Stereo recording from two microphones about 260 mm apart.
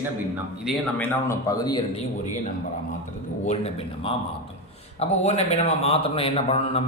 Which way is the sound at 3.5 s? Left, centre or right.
Left.